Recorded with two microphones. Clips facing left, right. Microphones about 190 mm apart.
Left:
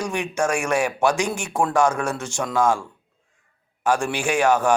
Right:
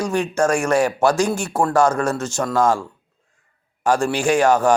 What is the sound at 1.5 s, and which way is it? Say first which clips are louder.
Speech: right 3 dB; 5° right (ahead or behind).